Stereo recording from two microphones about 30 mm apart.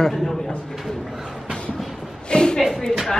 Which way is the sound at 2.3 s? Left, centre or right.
Left.